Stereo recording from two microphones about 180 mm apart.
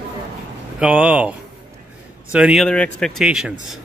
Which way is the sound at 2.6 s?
5° left (ahead or behind).